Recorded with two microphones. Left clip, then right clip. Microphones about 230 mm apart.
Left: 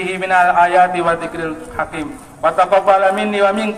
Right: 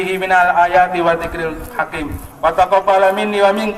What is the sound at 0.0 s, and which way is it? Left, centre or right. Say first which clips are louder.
A man's voice: right 1 dB; centre.